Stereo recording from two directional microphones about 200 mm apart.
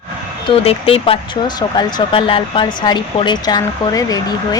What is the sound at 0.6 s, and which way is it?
Speech, 30° left (ahead or behind).